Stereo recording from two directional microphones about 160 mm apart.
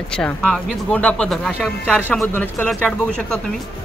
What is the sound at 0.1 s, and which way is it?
Speech, 5° left (ahead or behind).